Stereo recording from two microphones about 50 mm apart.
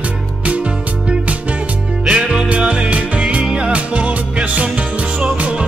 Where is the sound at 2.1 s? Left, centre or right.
Right.